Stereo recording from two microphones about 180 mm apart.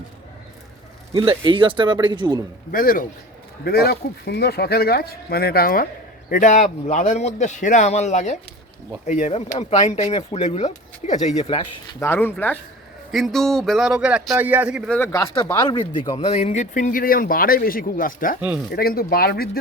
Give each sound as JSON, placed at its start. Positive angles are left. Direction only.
{"t": 1.1, "sound": "speech", "side_deg": -30}
{"t": 2.7, "sound": "speech", "side_deg": 50}
{"t": 11.9, "sound": "speech", "side_deg": 10}
{"t": 13.1, "sound": "speech", "side_deg": 0}
{"t": 14.8, "sound": "speech", "side_deg": 10}